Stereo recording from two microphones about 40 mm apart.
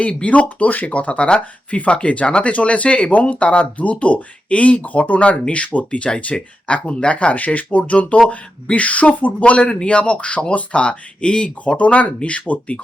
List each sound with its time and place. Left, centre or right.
0.3 s speech: left
0.9 s speech: left
9.5 s speech: left